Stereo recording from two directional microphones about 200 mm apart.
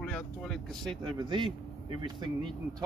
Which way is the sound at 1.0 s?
25° right (ahead or behind).